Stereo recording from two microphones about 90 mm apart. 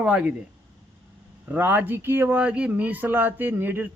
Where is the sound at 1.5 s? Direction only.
20° right (ahead or behind).